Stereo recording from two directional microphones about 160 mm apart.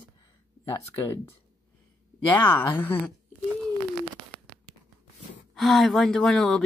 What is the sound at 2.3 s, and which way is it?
Speech, 10° left (ahead or behind).